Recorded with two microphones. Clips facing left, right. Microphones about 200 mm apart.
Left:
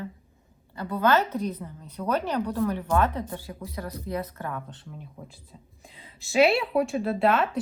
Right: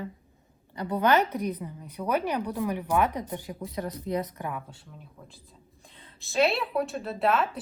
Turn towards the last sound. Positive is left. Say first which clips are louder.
# left 3 dB
turn(degrees=0)  # may be behind; listen again after turning